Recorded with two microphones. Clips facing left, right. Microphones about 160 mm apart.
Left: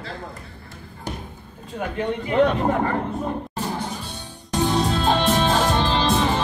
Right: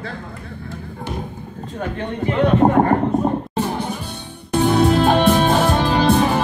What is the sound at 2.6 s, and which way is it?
Speech, 50° right (ahead or behind).